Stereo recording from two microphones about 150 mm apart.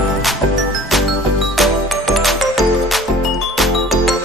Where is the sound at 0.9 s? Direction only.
Centre (ahead or behind).